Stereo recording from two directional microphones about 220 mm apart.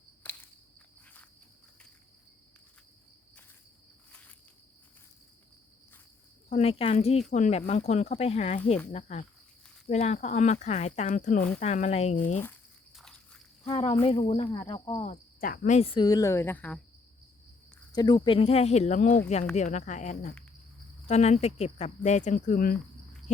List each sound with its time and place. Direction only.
0.2 s walk: 10° left (ahead or behind)
4.1 s insect: 5° left (ahead or behind)
6.5 s speech: 25° left (ahead or behind)
13.0 s walk: 5° left (ahead or behind)
13.7 s speech: 25° left (ahead or behind); by 16.8 s 5° left (ahead or behind)
17.9 s speech: 20° left (ahead or behind); by 22.8 s 40° left (ahead or behind)